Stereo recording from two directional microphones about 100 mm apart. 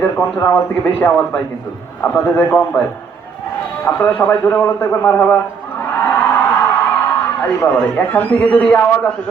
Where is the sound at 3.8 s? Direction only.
25° left (ahead or behind).